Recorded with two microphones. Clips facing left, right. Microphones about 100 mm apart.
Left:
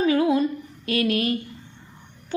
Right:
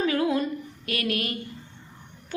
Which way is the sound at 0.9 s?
30° left (ahead or behind).